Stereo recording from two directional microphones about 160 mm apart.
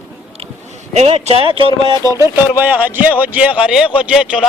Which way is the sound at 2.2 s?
15° right (ahead or behind).